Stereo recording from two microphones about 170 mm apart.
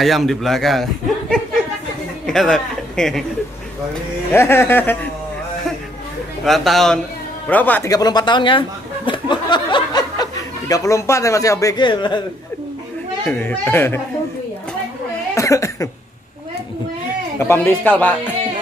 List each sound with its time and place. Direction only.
0.0 s speech: centre (ahead or behind)
2.2 s speech: centre (ahead or behind)
4.3 s speech: 15° left (ahead or behind)
6.4 s speech: centre (ahead or behind)
7.9 s chuckle: 25° left (ahead or behind)
13.3 s speech: 10° left (ahead or behind)
15.3 s cough: 20° left (ahead or behind)
17.4 s speech: 15° left (ahead or behind)